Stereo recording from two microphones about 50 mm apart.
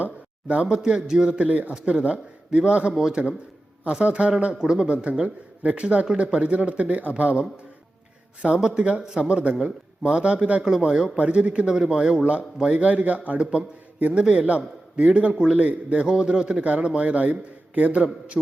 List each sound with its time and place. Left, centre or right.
0.0 s a sound: right
0.8 s a man's voice: centre
11.2 s a man's voice: right